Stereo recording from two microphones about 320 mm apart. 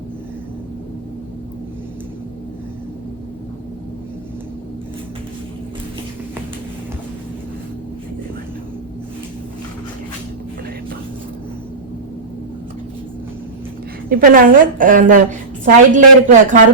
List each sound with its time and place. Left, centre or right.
14.1 s a woman's voice: right